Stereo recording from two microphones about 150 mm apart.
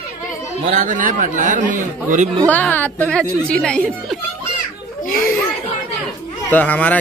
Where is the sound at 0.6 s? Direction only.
55° right (ahead or behind).